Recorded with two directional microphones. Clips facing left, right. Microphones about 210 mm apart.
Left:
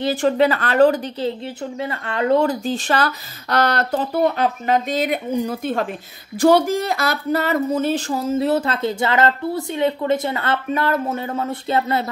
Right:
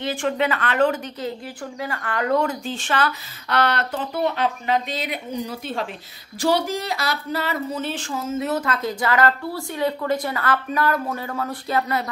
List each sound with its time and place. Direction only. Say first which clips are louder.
0.0 s speech: left 6 dB; 35° left (ahead or behind)
1.8 s speech: left 3 dB; 25° left (ahead or behind)